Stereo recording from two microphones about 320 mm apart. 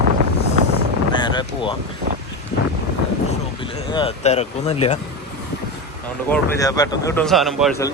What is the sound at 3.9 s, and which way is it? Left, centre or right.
Speech, centre.